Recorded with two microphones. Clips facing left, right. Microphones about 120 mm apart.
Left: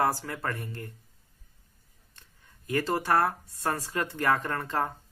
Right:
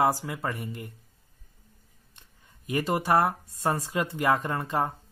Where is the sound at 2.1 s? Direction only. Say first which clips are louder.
Even; 15° right (ahead or behind).